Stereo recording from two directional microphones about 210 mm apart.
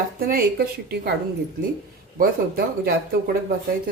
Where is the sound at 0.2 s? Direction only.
45° right (ahead or behind).